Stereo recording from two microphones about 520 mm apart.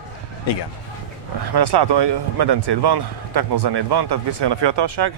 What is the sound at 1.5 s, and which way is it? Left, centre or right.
A man's voice, right.